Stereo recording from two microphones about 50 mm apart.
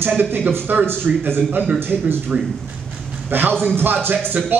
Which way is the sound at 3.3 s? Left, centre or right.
Right.